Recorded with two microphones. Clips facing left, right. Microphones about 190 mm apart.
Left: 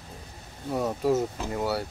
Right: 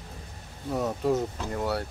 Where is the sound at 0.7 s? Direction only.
Centre (ahead or behind).